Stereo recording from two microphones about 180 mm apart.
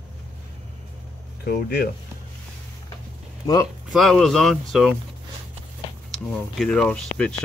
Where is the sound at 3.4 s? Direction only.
20° left (ahead or behind).